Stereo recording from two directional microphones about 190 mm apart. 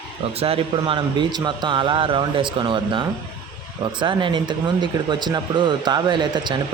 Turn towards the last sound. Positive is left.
turn(degrees=-25)  # may be behind; listen again after turning